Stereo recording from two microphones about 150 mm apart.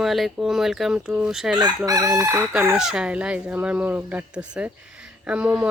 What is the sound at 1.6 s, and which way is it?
Crowing, 25° right (ahead or behind).